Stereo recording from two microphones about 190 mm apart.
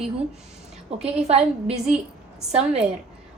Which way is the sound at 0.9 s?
35° right (ahead or behind).